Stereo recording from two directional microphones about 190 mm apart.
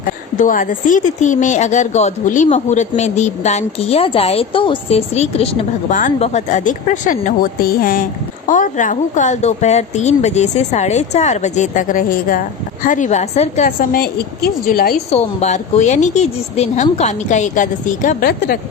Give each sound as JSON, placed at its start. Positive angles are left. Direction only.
{"t": 0.3, "sound": "a woman's voice", "side_deg": 45}
{"t": 13.7, "sound": "a woman's voice", "side_deg": 50}
{"t": 15.1, "sound": "a woman's voice", "side_deg": 35}